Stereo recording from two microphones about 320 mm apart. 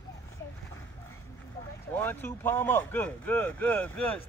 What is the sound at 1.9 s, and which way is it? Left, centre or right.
Speech, centre.